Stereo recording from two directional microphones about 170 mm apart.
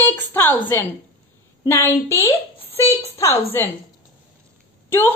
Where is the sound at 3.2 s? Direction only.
15° left (ahead or behind).